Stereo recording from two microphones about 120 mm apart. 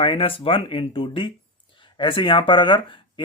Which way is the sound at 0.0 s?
50° left (ahead or behind).